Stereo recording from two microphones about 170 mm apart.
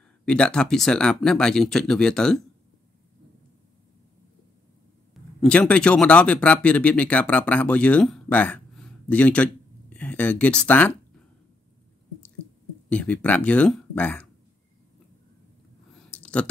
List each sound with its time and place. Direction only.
0.2 s speech: 5° left (ahead or behind)
5.4 s speech: 5° left (ahead or behind)
12.9 s speech: 10° left (ahead or behind)
16.1 s a sound: 5° left (ahead or behind)